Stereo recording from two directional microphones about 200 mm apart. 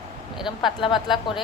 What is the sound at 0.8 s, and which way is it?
Speech, 25° left (ahead or behind).